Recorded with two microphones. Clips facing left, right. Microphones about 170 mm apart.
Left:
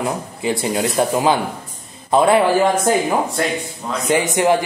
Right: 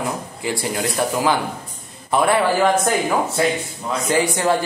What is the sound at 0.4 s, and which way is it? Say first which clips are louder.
A man's voice: left 5 dB; 20° left (ahead or behind).